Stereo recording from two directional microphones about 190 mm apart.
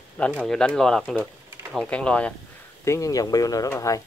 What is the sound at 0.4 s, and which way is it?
Speech, 5° left (ahead or behind).